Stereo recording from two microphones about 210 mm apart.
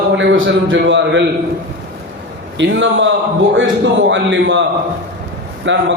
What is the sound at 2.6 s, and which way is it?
A man's voice, 60° right (ahead or behind).